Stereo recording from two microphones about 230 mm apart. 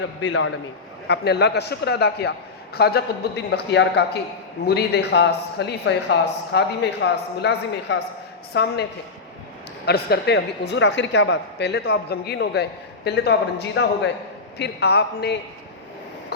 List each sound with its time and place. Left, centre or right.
0.2 s a man's voice: left
1.0 s a man's voice: left